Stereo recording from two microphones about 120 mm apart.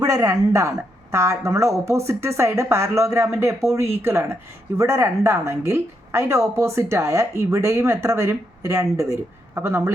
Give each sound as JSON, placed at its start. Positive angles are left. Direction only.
{"t": 0.0, "sound": "a woman's voice", "side_deg": -30}